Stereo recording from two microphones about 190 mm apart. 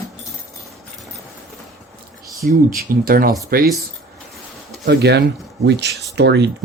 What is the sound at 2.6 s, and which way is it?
Speech, 50° right (ahead or behind).